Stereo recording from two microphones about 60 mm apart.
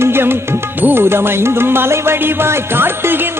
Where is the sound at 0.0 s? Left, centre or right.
Right.